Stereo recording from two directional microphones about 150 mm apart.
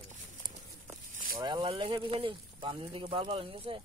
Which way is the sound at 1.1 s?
70° right (ahead or behind).